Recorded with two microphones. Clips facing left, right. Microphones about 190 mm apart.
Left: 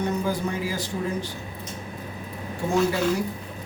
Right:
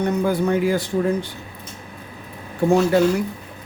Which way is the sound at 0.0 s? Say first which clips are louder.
Right 6 dB; 60° right (ahead or behind).